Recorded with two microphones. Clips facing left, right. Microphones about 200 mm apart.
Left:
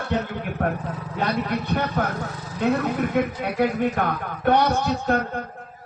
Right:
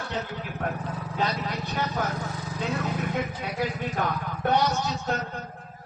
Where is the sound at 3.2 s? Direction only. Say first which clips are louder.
Left 7 dB; 55° left (ahead or behind).